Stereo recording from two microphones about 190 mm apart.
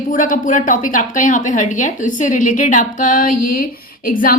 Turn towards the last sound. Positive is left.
turn(degrees=50)  # may be behind; listen again after turning